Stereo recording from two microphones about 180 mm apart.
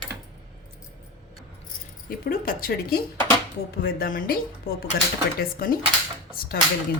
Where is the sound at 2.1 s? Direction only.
55° left (ahead or behind).